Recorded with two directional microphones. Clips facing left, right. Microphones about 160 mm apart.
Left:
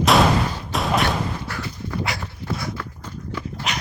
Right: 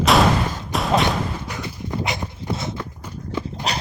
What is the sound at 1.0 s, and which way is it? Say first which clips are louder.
Dog: right 1 dB; 20° right (ahead or behind).